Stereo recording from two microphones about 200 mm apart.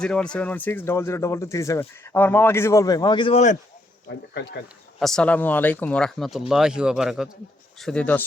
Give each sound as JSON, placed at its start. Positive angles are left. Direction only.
{"t": 0.0, "sound": "speech", "side_deg": 5}
{"t": 4.9, "sound": "speech", "side_deg": 0}